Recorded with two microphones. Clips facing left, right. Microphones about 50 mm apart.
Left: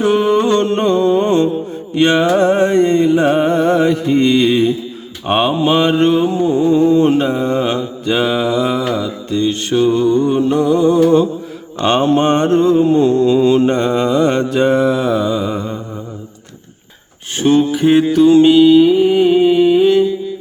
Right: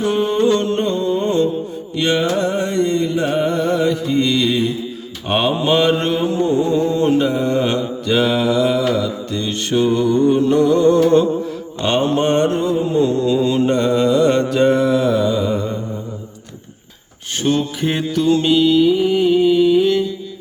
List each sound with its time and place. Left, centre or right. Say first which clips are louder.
0.3 s music: left 2 dB; centre
0.6 s music: left 5 dB; left
2.0 s mantra: left 6 dB; left
5.3 s mantra: left 3 dB; centre; by 7.3 s left
7.3 s mantra: left 1 dB; centre
11.8 s mantra: left 4 dB; left
17.4 s mantra: left 7 dB; centre
18.1 s music: left 5 dB; centre